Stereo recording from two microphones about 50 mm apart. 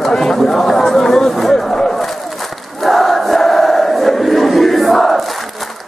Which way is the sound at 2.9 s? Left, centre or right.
Centre.